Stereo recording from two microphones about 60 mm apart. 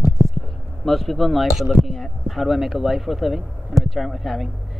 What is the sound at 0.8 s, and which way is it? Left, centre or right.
Speech, centre.